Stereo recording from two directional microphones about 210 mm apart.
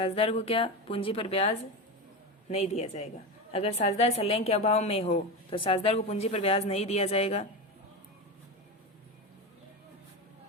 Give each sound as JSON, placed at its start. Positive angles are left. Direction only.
{"t": 0.0, "sound": "a woman's voice", "side_deg": 30}